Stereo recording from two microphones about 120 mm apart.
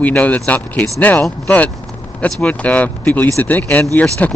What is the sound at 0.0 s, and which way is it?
Speech, 10° left (ahead or behind).